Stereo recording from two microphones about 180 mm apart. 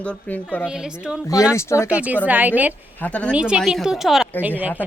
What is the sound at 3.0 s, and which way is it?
Speech, 5° left (ahead or behind).